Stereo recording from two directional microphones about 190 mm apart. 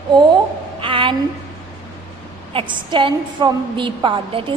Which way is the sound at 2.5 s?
25° right (ahead or behind).